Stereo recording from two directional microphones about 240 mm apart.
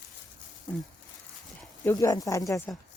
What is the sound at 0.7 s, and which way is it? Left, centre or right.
Speech, centre.